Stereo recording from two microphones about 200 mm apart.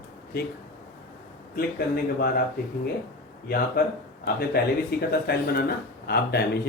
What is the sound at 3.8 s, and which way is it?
Speech, 55° left (ahead or behind).